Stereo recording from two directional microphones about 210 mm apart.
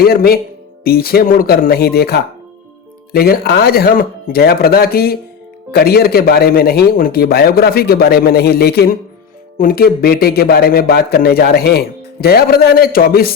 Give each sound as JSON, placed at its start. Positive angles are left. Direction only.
{"t": 0.0, "sound": "speech", "side_deg": 45}